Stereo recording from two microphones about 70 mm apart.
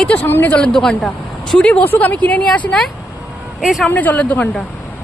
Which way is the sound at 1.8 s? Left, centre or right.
Left.